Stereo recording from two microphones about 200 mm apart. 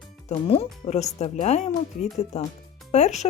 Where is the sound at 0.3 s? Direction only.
30° left (ahead or behind).